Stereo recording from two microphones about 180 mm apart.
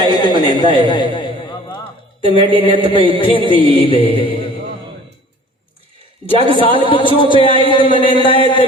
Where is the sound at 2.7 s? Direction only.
30° left (ahead or behind).